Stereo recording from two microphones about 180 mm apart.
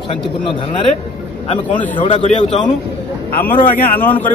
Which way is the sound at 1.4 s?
35° left (ahead or behind).